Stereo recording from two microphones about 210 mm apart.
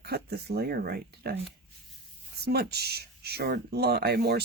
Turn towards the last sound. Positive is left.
turn(degrees=-50)  # may be behind; listen again after turning